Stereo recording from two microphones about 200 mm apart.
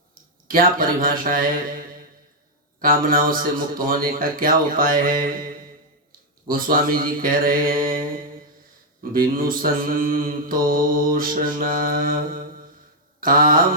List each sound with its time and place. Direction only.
0.4 s speech: 45° right (ahead or behind)
2.8 s speech: 45° right (ahead or behind)
13.1 s mantra: 45° right (ahead or behind)